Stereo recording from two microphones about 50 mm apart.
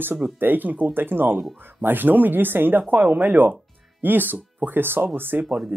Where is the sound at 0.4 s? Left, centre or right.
Right.